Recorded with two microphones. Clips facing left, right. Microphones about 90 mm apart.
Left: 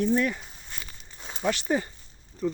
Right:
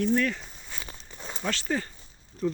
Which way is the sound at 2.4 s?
Centre (ahead or behind).